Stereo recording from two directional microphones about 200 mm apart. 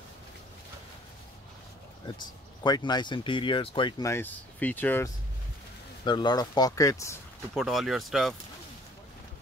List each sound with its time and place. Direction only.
2.0 s speech: 20° left (ahead or behind)
4.1 s speech: 10° left (ahead or behind)
6.0 s speech: 20° left (ahead or behind)
7.5 s speech: centre (ahead or behind)